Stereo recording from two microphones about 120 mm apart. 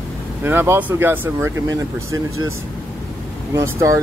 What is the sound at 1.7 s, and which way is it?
Speech, 30° right (ahead or behind).